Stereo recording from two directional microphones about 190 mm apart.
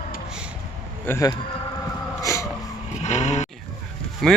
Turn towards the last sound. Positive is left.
turn(degrees=0)  # may be behind; listen again after turning